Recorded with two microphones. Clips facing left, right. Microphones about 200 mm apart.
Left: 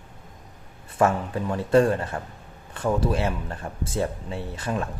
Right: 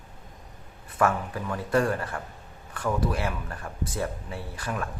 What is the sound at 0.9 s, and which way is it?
Speech, 25° left (ahead or behind).